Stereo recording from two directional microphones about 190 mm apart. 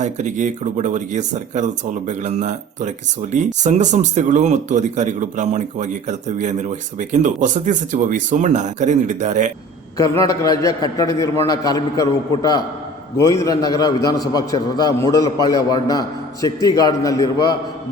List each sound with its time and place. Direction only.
0.0 s speech: 40° right (ahead or behind)
10.2 s a man's voice: 20° left (ahead or behind)